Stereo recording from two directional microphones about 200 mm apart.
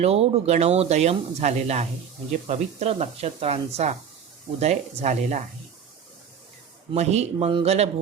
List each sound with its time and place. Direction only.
0.0 s speech: 30° right (ahead or behind)
6.9 s speech: 35° right (ahead or behind)